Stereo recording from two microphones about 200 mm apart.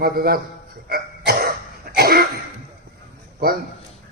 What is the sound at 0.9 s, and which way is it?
Cough, 50° right (ahead or behind).